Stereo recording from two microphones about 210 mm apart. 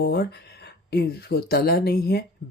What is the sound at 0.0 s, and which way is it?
Speech, 50° left (ahead or behind).